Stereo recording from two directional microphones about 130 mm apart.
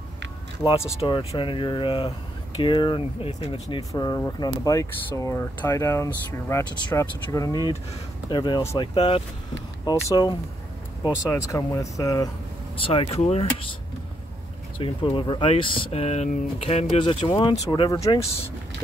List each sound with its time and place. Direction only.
1.3 s speech: 40° left (ahead or behind)
3.9 s speech: 25° left (ahead or behind)
12.7 s speech: 45° left (ahead or behind)
14.8 s speech: 40° left (ahead or behind)